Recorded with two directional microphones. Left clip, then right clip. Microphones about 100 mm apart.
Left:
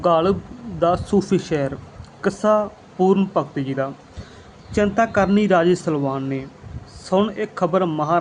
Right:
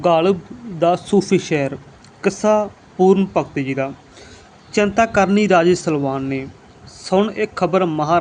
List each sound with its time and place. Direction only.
0.0 s a man's voice: 35° right (ahead or behind)